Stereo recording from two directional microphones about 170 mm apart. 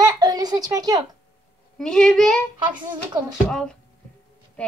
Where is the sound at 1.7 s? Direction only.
5° left (ahead or behind).